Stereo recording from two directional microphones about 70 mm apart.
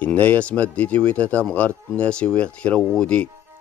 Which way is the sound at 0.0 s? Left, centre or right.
Left.